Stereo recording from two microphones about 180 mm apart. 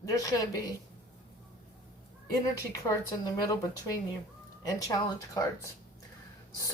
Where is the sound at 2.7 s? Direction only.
20° left (ahead or behind).